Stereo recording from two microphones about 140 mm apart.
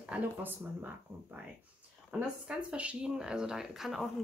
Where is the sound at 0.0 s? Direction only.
10° right (ahead or behind).